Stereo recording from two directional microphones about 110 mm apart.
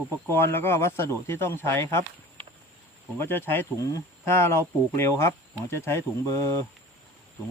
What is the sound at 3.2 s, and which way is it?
Speech, 20° left (ahead or behind).